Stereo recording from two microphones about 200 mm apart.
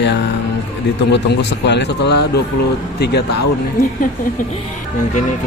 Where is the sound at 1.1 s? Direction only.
60° left (ahead or behind).